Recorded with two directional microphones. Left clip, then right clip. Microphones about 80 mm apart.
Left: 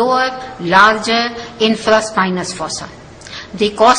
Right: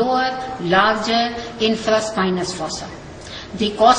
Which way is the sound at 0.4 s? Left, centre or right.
Left.